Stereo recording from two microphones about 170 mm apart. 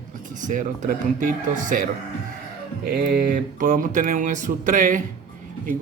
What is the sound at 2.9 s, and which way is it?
Mantra, 65° right (ahead or behind).